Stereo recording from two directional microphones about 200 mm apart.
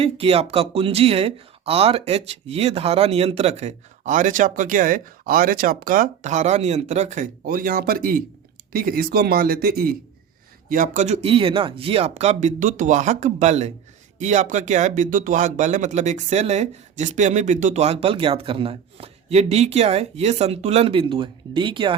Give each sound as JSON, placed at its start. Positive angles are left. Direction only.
{"t": 0.0, "sound": "speech", "side_deg": -30}